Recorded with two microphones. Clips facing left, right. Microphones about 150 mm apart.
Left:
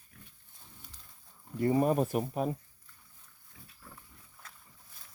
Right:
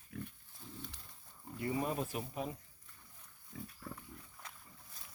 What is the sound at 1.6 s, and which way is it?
Speech, 40° left (ahead or behind).